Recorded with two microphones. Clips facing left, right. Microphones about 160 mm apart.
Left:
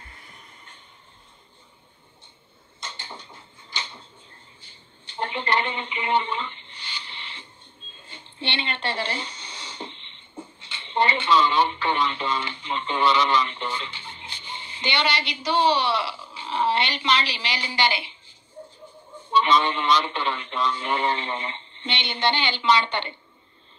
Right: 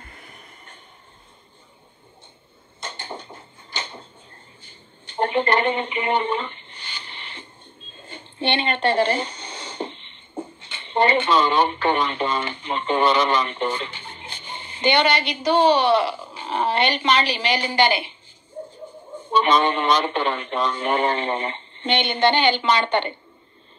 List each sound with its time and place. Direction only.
2.8 s a sound: 50° right (ahead or behind)
7.9 s speech: 50° right (ahead or behind)
19.1 s speech: 50° right (ahead or behind)